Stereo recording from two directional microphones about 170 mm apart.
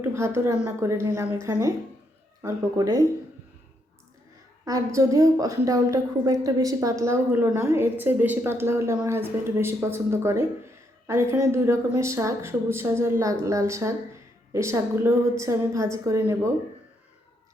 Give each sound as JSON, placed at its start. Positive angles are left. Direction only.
{"t": 0.0, "sound": "a woman's voice", "side_deg": -15}
{"t": 4.6, "sound": "a woman's voice", "side_deg": -20}